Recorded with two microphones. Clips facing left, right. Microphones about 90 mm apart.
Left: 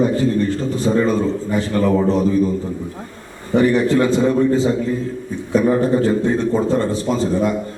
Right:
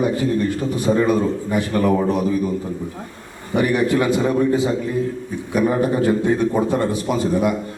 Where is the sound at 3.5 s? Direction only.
15° right (ahead or behind).